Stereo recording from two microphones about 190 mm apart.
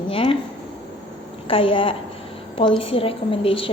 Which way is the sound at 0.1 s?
30° left (ahead or behind).